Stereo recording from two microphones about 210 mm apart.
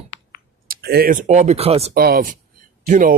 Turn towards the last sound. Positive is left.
turn(degrees=-40)  # may be behind; listen again after turning